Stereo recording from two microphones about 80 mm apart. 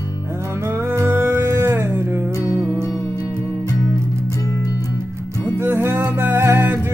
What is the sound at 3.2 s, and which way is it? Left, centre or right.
Music, right.